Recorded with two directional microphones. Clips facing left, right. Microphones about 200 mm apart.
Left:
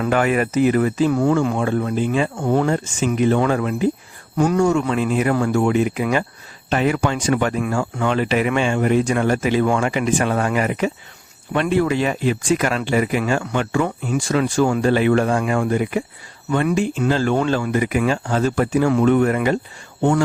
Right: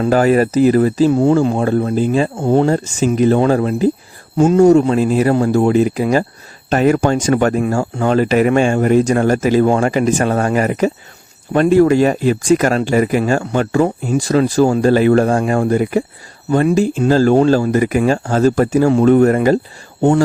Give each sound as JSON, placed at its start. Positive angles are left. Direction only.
{"t": 0.0, "sound": "speech", "side_deg": -35}